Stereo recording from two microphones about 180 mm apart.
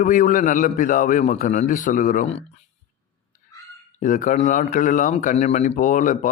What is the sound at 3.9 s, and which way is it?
Speech, 45° left (ahead or behind).